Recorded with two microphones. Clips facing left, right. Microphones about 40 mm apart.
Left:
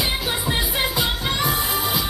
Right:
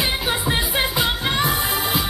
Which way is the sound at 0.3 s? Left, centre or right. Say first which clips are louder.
Right 2 dB; centre.